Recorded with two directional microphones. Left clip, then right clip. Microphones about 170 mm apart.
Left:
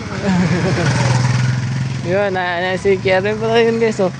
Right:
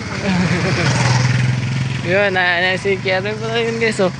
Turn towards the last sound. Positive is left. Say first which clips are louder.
# even
turn(degrees=10)  # may be behind; listen again after turning